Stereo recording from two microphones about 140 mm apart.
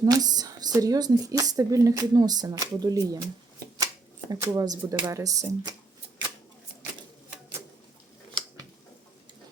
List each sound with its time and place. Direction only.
0.0 s a woman's voice: 30° right (ahead or behind)
4.3 s a woman's voice: 25° right (ahead or behind)